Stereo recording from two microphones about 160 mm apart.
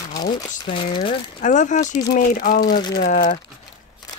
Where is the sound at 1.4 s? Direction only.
50° left (ahead or behind).